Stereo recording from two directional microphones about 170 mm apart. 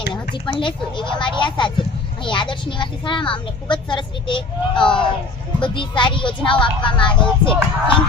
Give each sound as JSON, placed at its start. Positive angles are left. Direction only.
{"t": 0.6, "sound": "a child's voice", "side_deg": 30}
{"t": 4.8, "sound": "speech", "side_deg": 5}
{"t": 5.5, "sound": "a child's voice", "side_deg": 30}